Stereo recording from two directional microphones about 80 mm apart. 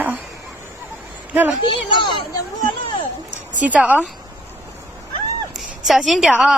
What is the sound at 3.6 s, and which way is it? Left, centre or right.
Speech, centre.